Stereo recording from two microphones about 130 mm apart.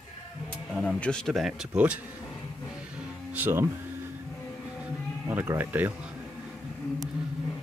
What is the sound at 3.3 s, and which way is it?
Speech, 15° right (ahead or behind).